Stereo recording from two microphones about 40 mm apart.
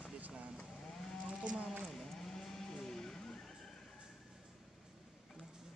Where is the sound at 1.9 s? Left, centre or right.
Centre.